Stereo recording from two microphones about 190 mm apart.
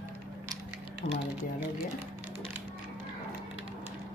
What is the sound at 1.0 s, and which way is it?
Speech, 50° left (ahead or behind).